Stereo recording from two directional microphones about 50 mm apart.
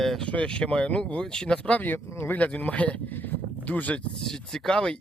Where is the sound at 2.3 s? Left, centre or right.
Left.